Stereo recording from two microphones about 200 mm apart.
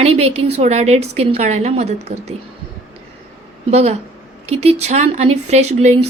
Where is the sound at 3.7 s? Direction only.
30° right (ahead or behind).